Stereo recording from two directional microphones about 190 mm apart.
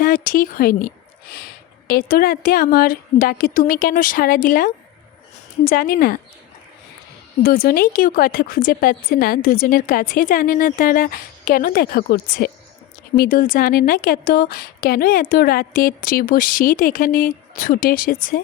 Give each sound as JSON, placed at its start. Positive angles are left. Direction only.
{"t": 0.0, "sound": "a sound", "side_deg": 50}
{"t": 1.9, "sound": "a woman's voice", "side_deg": 50}
{"t": 7.4, "sound": "a woman's voice", "side_deg": 50}